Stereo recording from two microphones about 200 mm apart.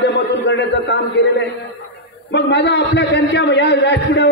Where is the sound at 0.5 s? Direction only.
60° left (ahead or behind).